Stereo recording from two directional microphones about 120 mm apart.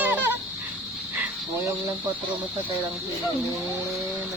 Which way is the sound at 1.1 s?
15° right (ahead or behind).